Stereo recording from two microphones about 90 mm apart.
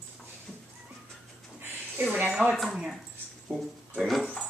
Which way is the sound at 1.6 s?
15° right (ahead or behind).